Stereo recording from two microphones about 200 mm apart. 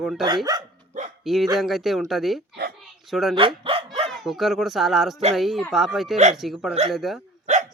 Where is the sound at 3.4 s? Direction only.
25° right (ahead or behind).